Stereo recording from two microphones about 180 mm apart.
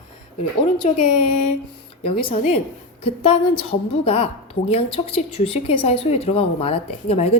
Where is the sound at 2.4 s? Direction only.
35° left (ahead or behind).